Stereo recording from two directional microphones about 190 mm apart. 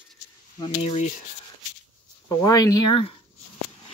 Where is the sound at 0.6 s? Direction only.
30° left (ahead or behind).